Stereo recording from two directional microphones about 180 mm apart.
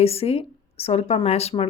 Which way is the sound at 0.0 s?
35° left (ahead or behind).